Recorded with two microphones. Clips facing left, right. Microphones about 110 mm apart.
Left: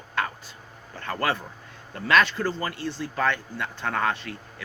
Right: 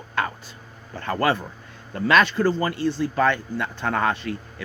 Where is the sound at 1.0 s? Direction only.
15° right (ahead or behind).